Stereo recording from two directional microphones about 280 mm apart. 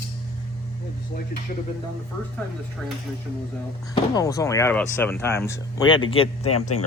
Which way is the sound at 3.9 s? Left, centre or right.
Centre.